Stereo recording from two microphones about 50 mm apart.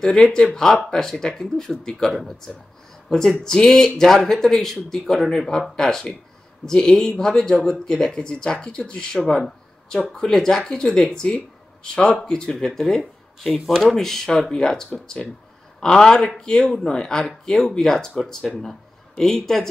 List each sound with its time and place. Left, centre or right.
0.0 s a man's voice: centre